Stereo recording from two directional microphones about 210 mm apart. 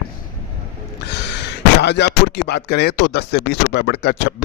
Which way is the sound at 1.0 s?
55° left (ahead or behind).